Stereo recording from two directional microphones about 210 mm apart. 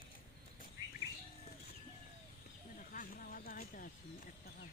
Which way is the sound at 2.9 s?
40° left (ahead or behind).